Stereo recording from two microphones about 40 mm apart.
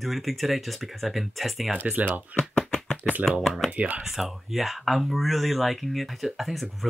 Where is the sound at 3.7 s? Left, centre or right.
Right.